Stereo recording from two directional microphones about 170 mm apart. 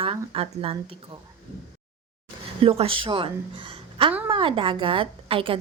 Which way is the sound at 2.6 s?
35° right (ahead or behind).